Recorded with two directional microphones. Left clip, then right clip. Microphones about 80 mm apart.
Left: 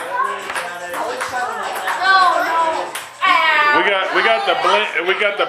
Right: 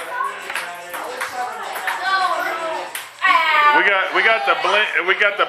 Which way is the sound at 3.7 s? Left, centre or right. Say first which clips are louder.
Even; centre.